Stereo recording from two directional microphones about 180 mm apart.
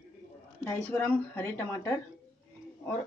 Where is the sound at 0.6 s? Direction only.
10° left (ahead or behind).